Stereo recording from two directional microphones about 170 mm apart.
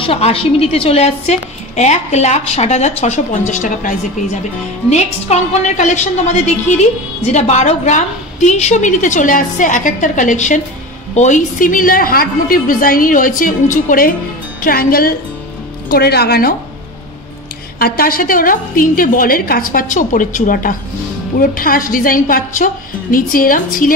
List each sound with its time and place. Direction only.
0.0 s a woman's voice: 35° left (ahead or behind); by 16.5 s 65° left (ahead or behind)
17.7 s a woman's voice: 60° left (ahead or behind)